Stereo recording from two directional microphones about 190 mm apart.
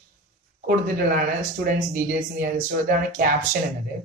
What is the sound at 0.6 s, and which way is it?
Speech, 50° right (ahead or behind).